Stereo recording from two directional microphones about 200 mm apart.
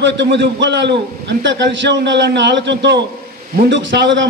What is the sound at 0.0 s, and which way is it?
A man's voice, 60° right (ahead or behind).